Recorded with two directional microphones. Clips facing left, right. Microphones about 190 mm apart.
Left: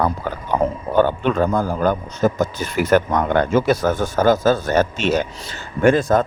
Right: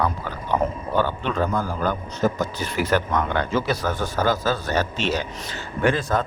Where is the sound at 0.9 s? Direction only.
50° left (ahead or behind).